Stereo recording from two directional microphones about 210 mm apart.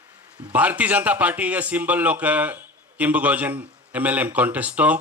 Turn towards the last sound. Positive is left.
turn(degrees=-5)  # may be behind; listen again after turning